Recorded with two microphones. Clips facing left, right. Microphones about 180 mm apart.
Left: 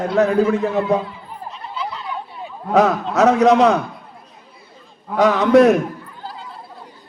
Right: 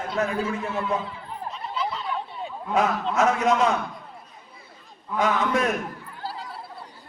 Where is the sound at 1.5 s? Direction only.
Centre (ahead or behind).